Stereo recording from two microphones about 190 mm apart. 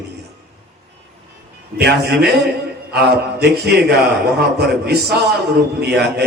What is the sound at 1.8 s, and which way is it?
A man's voice, 60° right (ahead or behind).